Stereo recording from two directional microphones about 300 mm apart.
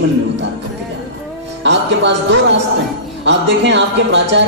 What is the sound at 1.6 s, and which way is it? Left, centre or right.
Speech, right.